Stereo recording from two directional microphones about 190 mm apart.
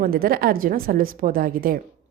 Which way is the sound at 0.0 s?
50° right (ahead or behind).